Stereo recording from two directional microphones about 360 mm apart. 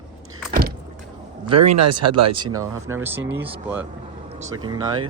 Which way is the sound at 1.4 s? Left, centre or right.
Right.